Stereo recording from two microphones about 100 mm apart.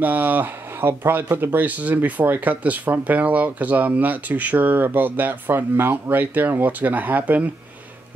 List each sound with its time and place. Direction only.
0.0 s speech: 15° right (ahead or behind)